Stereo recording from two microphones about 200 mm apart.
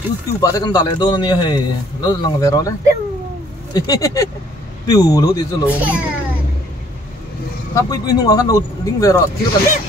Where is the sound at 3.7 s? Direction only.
15° left (ahead or behind).